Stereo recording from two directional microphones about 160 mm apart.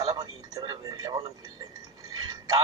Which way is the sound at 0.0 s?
25° right (ahead or behind).